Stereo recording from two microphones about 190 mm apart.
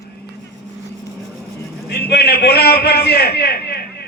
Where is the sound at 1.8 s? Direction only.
55° left (ahead or behind).